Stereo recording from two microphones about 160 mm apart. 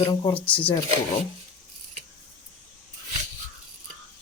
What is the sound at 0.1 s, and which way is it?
Speech, 30° left (ahead or behind).